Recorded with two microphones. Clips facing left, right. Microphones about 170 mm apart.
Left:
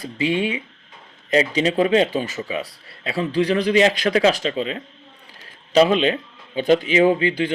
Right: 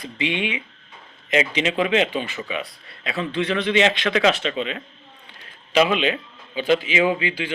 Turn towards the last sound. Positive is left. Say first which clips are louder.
# left 5 dB
turn(degrees=40)  # may be behind; listen again after turning